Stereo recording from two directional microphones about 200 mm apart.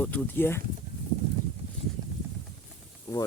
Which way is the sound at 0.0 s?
5° left (ahead or behind).